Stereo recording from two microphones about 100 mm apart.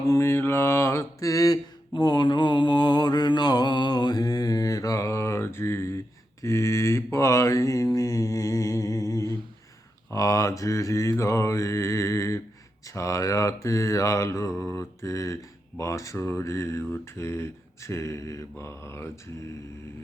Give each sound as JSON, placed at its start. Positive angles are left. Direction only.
{"t": 0.1, "sound": "mantra", "side_deg": 25}